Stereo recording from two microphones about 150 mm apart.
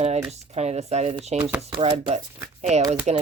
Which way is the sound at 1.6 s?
40° right (ahead or behind).